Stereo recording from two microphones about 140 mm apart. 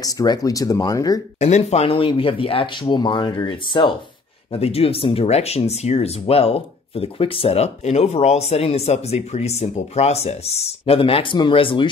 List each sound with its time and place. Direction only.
0.0 s speech: 25° left (ahead or behind)
1.4 s speech: 50° left (ahead or behind)
4.5 s speech: 45° left (ahead or behind)